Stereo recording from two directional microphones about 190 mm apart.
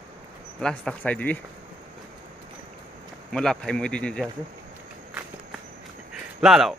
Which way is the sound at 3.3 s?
5° left (ahead or behind).